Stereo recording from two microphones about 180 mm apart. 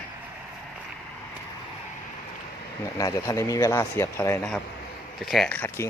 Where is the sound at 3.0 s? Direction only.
20° left (ahead or behind).